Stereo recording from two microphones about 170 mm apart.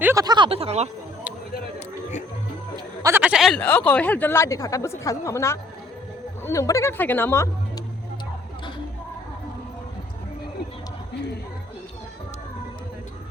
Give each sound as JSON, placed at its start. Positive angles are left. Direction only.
{"t": 0.0, "sound": "speech", "side_deg": -20}
{"t": 3.0, "sound": "speech", "side_deg": -10}